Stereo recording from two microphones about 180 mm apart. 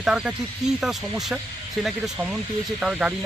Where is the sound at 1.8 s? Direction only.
5° right (ahead or behind).